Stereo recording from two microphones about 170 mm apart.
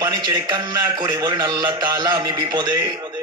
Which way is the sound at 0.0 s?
20° right (ahead or behind).